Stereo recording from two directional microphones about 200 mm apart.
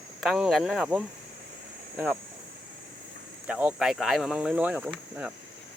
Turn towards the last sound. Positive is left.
turn(degrees=-10)  # may be behind; listen again after turning